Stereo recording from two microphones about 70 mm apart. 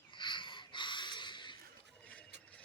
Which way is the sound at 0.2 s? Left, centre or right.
Left.